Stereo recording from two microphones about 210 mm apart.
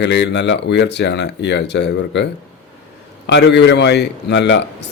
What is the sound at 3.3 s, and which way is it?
Speech, 55° left (ahead or behind).